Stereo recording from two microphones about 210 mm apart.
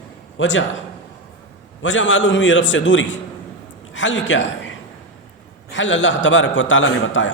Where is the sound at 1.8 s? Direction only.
65° left (ahead or behind).